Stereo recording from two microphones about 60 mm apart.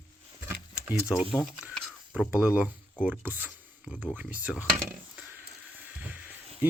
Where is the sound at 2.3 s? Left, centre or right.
Centre.